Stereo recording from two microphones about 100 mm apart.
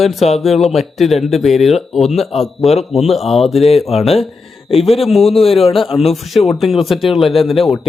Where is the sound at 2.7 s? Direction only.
90° left.